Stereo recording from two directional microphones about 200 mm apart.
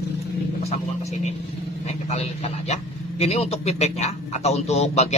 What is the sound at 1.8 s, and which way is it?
Speech, 30° left (ahead or behind).